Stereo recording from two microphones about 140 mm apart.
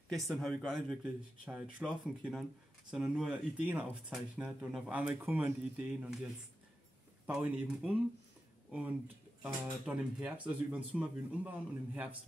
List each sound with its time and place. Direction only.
0.1 s speech: centre (ahead or behind)
9.4 s speech: 10° right (ahead or behind)